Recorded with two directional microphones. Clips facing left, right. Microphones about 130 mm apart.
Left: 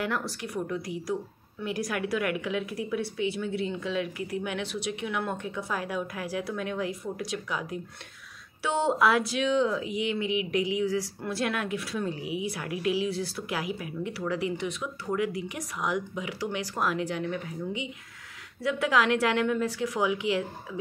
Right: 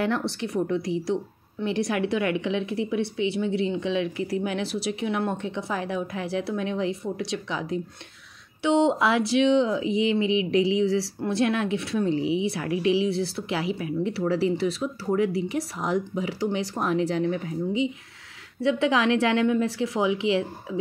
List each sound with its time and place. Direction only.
0.0 s a woman's voice: 30° right (ahead or behind)